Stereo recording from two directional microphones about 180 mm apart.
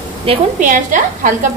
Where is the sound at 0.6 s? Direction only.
45° right (ahead or behind).